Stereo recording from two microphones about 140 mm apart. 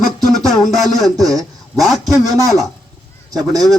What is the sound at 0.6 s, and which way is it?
Speech, centre (ahead or behind).